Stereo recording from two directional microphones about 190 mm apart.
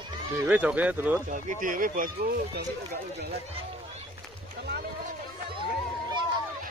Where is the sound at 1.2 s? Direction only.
45° right (ahead or behind).